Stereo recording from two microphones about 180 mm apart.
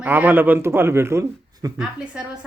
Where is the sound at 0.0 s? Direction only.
10° right (ahead or behind).